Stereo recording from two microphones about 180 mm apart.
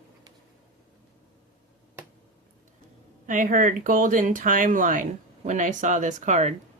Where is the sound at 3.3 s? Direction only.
45° right (ahead or behind).